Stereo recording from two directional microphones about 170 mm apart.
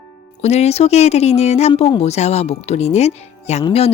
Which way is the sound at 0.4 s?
40° left (ahead or behind).